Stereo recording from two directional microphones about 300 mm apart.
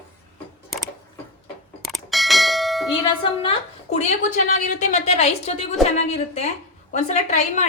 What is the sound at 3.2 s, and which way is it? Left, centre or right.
A woman's voice, centre.